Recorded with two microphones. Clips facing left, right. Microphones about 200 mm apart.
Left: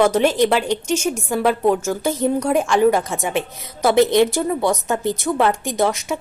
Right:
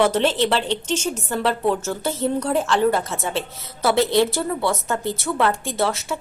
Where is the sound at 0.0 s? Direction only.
10° left (ahead or behind).